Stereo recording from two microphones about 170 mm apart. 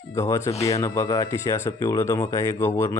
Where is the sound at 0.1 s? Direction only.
15° left (ahead or behind).